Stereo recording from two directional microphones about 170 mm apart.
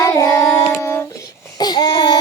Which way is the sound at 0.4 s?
10° left (ahead or behind).